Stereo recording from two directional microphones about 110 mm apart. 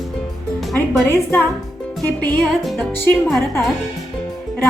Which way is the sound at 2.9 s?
20° left (ahead or behind).